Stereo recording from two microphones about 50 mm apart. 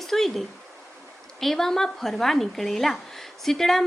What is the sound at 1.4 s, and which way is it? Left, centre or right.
A woman's voice, centre.